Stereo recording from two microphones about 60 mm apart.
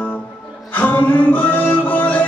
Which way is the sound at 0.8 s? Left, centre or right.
Left.